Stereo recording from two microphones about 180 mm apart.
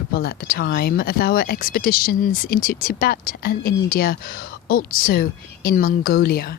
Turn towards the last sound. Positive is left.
turn(degrees=55)  # may be behind; listen again after turning